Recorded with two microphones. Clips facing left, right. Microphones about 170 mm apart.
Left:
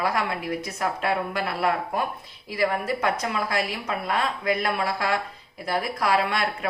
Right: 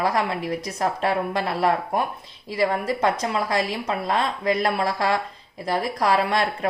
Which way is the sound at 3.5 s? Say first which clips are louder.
Right 3 dB; 35° right (ahead or behind).